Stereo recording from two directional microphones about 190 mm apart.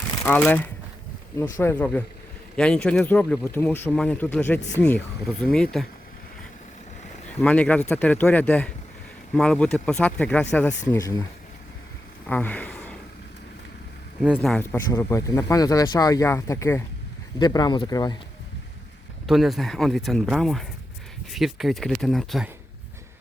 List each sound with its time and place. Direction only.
0.3 s speech: 10° left (ahead or behind)
7.3 s speech: 5° left (ahead or behind)
10.8 s speech: 20° left (ahead or behind)
12.2 s a sound: 10° left (ahead or behind)
14.3 s speech: 10° left (ahead or behind)
19.3 s speech: centre (ahead or behind)